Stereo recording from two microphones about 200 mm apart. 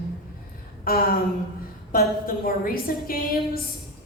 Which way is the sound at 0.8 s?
45° left (ahead or behind).